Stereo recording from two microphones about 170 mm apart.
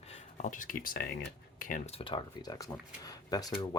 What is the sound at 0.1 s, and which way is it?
Speech, 45° left (ahead or behind).